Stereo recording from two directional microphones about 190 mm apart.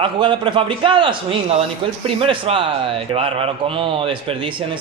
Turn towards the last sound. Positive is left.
turn(degrees=-30)  # may be behind; listen again after turning